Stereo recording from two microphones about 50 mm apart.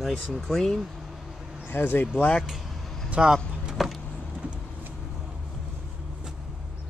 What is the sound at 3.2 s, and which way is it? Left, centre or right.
Speech, centre.